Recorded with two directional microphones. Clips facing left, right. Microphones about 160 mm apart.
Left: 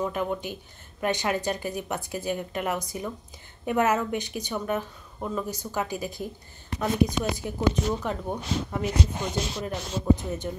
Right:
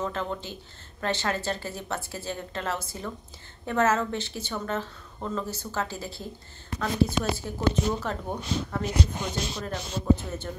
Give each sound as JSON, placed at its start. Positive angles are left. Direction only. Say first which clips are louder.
{"t": 0.0, "sound": "speech", "louder": "left 3 dB", "side_deg": 15}